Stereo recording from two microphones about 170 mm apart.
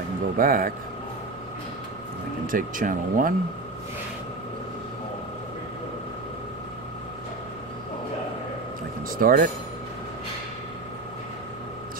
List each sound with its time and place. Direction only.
0.4 s speech: 55° right (ahead or behind)
2.4 s speech: 55° right (ahead or behind)
9.2 s speech: 60° right (ahead or behind)